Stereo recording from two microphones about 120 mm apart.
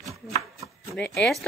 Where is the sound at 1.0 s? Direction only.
5° left (ahead or behind).